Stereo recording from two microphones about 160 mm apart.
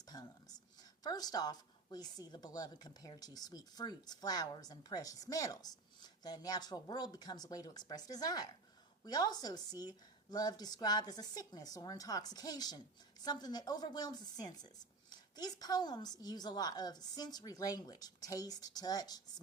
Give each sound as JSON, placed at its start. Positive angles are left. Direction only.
{"t": 0.0, "sound": "a woman's voice", "side_deg": 25}